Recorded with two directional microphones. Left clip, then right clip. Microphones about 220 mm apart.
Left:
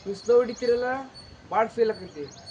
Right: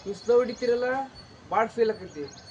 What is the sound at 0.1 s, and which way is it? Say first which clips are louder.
Speech: left 2 dB; centre (ahead or behind).